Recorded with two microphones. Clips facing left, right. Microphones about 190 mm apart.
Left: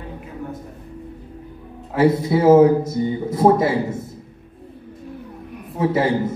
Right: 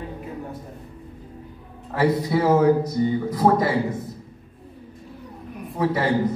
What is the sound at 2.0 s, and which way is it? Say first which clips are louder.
A man's voice: left 4 dB; 25° left (ahead or behind).